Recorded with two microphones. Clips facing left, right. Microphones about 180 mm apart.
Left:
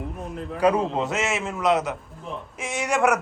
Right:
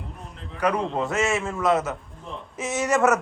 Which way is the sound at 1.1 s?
20° left (ahead or behind).